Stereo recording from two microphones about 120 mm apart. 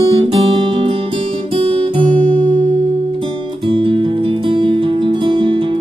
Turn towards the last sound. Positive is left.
turn(degrees=-45)  # may be behind; listen again after turning